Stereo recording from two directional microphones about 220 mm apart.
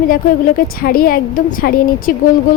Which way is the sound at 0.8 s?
40° left (ahead or behind).